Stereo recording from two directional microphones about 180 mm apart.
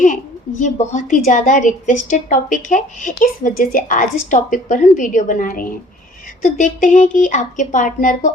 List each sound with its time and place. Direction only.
0.6 s a woman's voice: 45° left (ahead or behind)